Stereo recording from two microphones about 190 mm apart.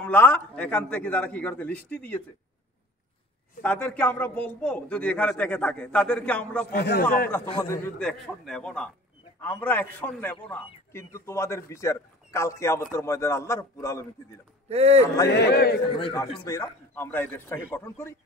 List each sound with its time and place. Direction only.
0.0 s a man's voice: 10° left (ahead or behind)
3.6 s a man's voice: 10° left (ahead or behind)
6.7 s speech: 55° left (ahead or behind)
7.4 s a man's voice: 30° left (ahead or behind)
8.0 s a man's voice: 5° left (ahead or behind)
14.7 s speech: 35° right (ahead or behind)
15.2 s speech: 60° left (ahead or behind)
16.0 s a man's voice: 20° left (ahead or behind)